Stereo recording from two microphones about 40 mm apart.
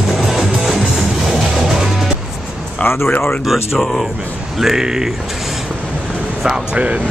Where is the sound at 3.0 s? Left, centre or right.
Left.